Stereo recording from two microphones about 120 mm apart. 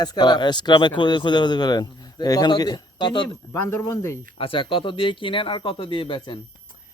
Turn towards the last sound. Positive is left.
turn(degrees=40)  # may be behind; listen again after turning